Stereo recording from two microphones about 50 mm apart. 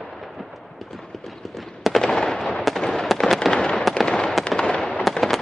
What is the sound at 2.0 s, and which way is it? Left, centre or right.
Fireworks, centre.